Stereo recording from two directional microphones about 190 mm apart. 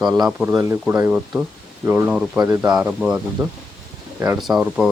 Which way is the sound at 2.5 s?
20° right (ahead or behind).